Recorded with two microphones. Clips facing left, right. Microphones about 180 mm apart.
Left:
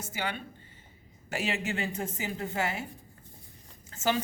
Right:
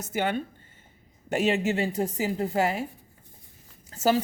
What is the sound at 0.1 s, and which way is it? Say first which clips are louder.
Speech: right 9 dB; 50° right (ahead or behind).